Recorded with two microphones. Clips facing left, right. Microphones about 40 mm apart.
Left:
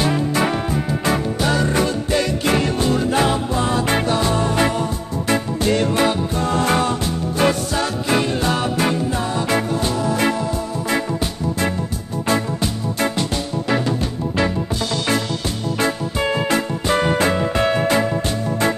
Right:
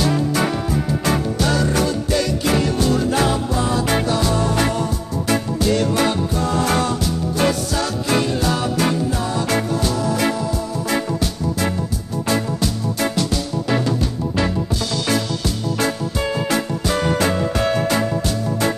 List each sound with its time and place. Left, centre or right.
0.0 s music: left
13.1 s music: left